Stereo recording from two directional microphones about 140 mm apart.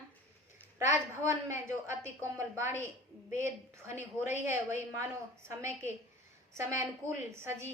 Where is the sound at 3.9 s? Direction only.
20° right (ahead or behind).